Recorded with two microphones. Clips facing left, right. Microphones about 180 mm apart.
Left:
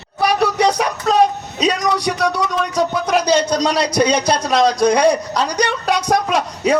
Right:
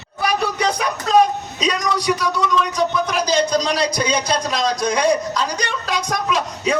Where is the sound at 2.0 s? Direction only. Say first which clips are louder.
Left 1 dB; 65° left (ahead or behind).